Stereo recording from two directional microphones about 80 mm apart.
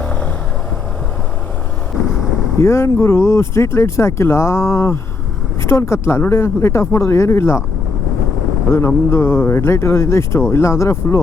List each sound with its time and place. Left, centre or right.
0.0 s vehicle: left
2.6 s speech: left
9.0 s speech: left